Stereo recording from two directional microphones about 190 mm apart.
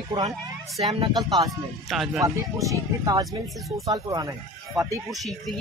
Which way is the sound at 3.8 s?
20° right (ahead or behind).